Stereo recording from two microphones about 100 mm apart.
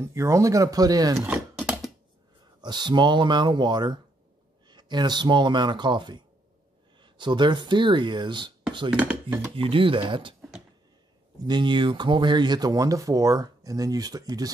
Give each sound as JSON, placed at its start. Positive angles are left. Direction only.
{"t": 0.0, "sound": "speech", "side_deg": -30}
{"t": 1.6, "sound": "a sound", "side_deg": -5}
{"t": 2.6, "sound": "speech", "side_deg": -45}
{"t": 8.9, "sound": "speech", "side_deg": -15}
{"t": 9.6, "sound": "speech", "side_deg": -60}
{"t": 11.4, "sound": "speech", "side_deg": -50}